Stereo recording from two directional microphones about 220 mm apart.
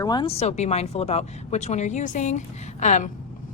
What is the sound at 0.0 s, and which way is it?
Speech, 20° left (ahead or behind).